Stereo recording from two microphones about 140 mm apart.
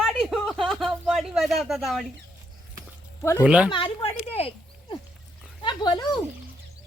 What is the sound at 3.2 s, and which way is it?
Speech, 20° left (ahead or behind).